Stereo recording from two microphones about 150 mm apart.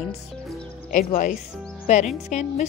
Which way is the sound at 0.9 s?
60° left (ahead or behind).